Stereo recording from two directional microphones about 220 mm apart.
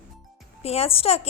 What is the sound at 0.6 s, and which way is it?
Speech, 25° left (ahead or behind).